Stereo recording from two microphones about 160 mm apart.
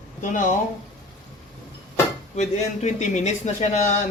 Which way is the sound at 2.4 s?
45° left (ahead or behind).